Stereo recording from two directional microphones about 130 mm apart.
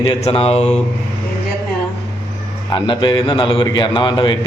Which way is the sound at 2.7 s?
35° left (ahead or behind).